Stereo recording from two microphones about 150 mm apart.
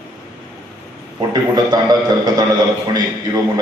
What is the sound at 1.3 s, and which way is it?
A man's voice, 25° right (ahead or behind).